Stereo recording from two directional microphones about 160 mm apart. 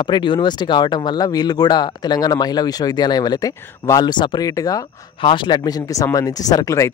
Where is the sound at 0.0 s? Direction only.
30° left (ahead or behind).